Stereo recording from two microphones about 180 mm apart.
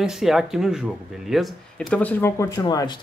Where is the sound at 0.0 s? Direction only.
Centre (ahead or behind).